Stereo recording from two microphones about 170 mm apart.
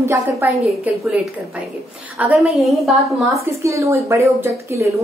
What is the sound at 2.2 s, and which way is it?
A woman's voice, 5° right (ahead or behind).